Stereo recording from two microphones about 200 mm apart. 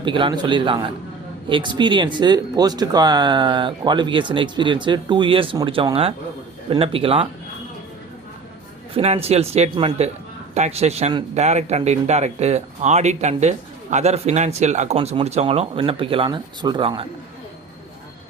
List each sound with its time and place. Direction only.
0.0 s speech: 25° right (ahead or behind)
8.9 s speech: 30° right (ahead or behind)